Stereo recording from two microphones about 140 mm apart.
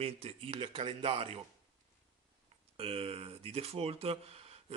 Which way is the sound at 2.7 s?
45° right (ahead or behind).